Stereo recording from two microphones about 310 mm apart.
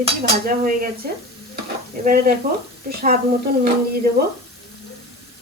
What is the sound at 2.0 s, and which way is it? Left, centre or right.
Dishes, right.